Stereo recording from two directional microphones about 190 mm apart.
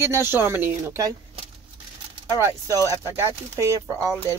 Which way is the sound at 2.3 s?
15° right (ahead or behind).